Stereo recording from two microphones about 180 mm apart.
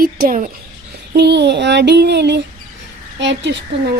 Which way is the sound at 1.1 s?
70° right (ahead or behind).